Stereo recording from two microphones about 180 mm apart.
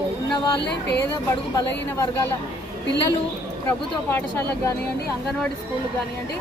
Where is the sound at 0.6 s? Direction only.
70° left (ahead or behind).